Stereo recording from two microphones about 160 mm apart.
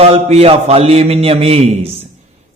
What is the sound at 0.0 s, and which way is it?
A man's voice, 40° right (ahead or behind).